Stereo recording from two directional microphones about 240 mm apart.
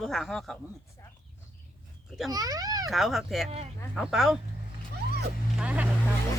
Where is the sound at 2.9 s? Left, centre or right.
Centre.